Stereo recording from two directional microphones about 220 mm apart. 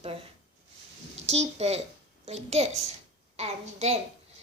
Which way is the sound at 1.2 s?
30° right (ahead or behind).